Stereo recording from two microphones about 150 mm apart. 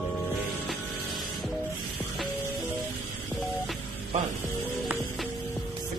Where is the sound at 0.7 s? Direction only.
Centre (ahead or behind).